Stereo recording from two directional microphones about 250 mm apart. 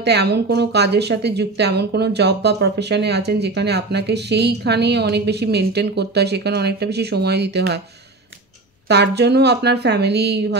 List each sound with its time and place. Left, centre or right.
0.0 s speech: right
8.8 s speech: right